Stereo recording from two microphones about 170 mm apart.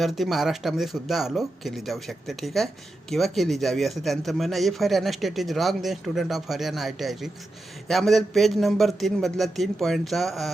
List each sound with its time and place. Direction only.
0.0 s a man's voice: centre (ahead or behind)